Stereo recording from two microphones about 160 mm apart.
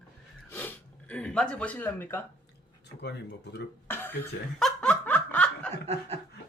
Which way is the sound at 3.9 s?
15° left (ahead or behind).